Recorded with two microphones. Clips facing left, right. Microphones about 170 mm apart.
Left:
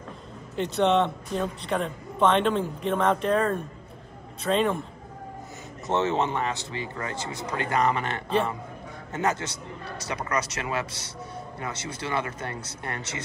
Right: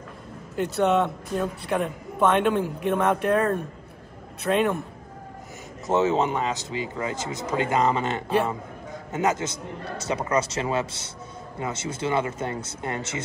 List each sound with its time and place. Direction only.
0.6 s speech: 5° right (ahead or behind)
6.1 s a man's voice: 15° right (ahead or behind)
8.3 s a man's voice: 10° right (ahead or behind)